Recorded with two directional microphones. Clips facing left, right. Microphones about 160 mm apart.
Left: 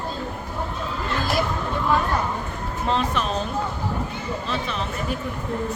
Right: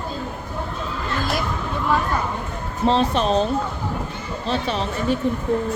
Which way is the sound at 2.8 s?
30° right (ahead or behind).